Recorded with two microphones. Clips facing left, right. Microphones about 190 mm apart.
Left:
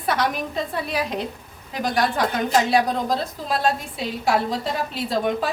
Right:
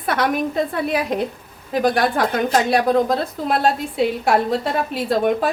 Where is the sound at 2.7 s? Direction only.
55° right (ahead or behind).